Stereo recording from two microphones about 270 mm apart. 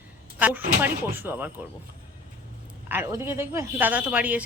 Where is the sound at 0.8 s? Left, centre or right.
Centre.